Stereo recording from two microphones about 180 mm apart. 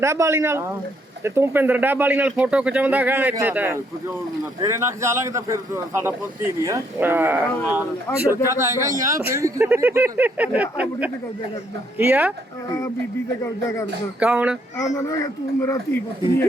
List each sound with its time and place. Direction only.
0.0 s a man's voice: 15° right (ahead or behind)
8.4 s a man's voice: 15° right (ahead or behind)
13.4 s speech: 15° left (ahead or behind)
14.2 s speech: 5° right (ahead or behind)
14.8 s speech: 20° left (ahead or behind)